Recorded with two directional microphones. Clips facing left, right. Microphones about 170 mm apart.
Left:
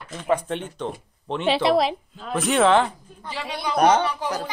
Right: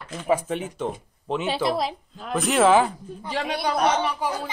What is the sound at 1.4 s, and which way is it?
Speech, 80° left.